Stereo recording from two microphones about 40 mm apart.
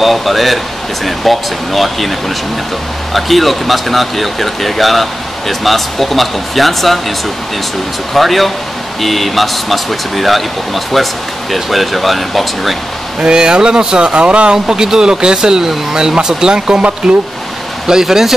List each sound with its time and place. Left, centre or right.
0.0 s speech: centre
8.1 s speech: centre
13.2 s speech: right
17.8 s speech: centre